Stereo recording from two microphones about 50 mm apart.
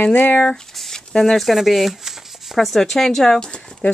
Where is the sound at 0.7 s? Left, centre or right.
Centre.